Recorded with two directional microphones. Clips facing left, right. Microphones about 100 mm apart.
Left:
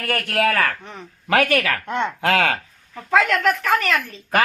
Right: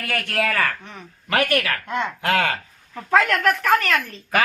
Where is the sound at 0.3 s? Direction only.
55° left (ahead or behind).